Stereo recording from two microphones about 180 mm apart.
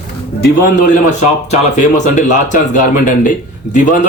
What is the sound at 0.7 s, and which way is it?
Speech, 45° left (ahead or behind).